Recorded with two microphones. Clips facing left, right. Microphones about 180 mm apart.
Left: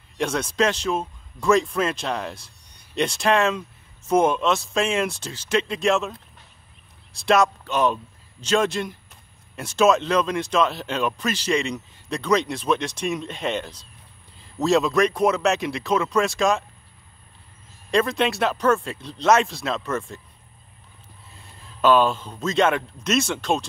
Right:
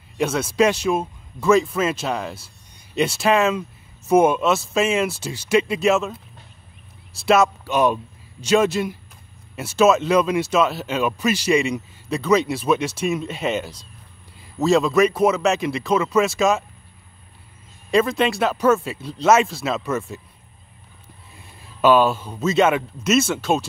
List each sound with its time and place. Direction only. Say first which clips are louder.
0.2 s a man's voice: right 4 dB; 5° right (ahead or behind)
17.9 s speech: right 3 dB; centre (ahead or behind)
21.4 s a man's voice: right 3 dB; 10° right (ahead or behind)